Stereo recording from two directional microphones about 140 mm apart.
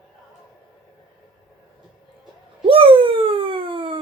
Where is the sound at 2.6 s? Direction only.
40° right (ahead or behind).